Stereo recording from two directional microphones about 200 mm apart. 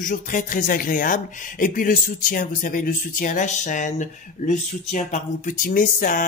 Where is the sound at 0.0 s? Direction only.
40° left (ahead or behind).